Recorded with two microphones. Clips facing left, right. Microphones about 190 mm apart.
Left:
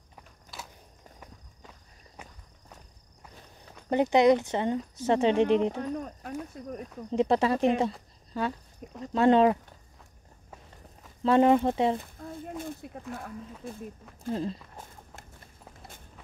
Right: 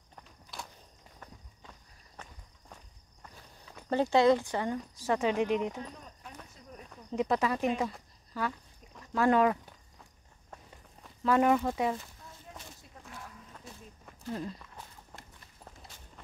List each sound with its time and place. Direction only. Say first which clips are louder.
0.1 s walk: left 1 dB; 5° left (ahead or behind)
2.2 s walk: left 2 dB; 10° left (ahead or behind)
3.9 s speech: left 3 dB; 20° left (ahead or behind)
5.8 s speech: left 11 dB; 60° left (ahead or behind)
7.1 s speech: left 5 dB; 30° left (ahead or behind)
11.2 s speech: left 5 dB; 25° left (ahead or behind)
12.2 s speech: left 13 dB; 55° left (ahead or behind)